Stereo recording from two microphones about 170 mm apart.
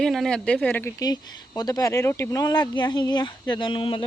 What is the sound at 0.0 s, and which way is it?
Speech, centre (ahead or behind).